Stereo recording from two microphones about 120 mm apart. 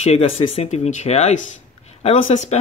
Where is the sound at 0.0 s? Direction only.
60° left (ahead or behind).